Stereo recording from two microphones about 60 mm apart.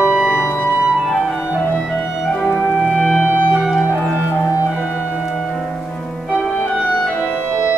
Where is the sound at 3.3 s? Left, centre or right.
Right.